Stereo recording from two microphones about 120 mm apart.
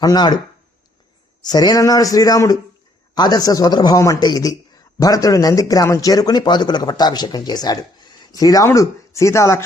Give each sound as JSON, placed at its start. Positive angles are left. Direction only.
{"t": 0.0, "sound": "a man's voice", "side_deg": 35}
{"t": 1.5, "sound": "a man's voice", "side_deg": 35}